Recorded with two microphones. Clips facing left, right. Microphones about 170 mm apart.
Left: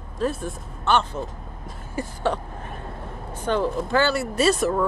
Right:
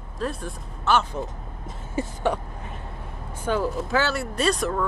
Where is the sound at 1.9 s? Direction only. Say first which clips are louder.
Even; 15° right (ahead or behind).